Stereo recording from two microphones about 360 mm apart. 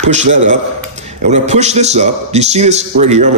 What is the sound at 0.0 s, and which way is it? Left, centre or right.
A man's voice, centre.